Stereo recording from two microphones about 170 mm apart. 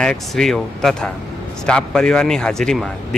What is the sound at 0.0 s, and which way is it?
Speech, 5° left (ahead or behind).